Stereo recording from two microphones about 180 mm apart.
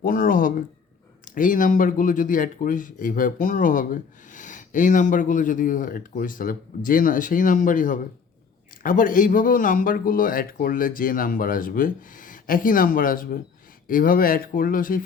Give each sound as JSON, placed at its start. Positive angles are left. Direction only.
{"t": 0.0, "sound": "a man's voice", "side_deg": 50}